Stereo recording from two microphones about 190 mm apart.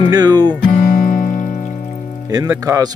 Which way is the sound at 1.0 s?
45° left (ahead or behind).